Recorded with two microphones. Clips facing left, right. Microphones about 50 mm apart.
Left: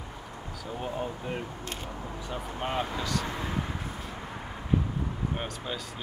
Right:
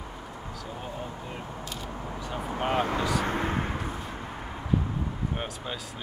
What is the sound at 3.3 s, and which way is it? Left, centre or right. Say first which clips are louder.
Speech: right 5 dB; right.